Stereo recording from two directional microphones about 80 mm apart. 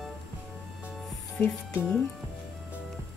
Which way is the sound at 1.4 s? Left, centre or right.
Left.